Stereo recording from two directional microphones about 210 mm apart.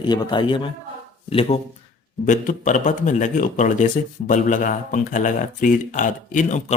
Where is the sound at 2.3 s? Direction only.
35° left (ahead or behind).